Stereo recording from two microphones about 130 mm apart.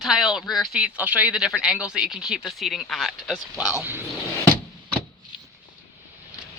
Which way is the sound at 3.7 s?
15° right (ahead or behind).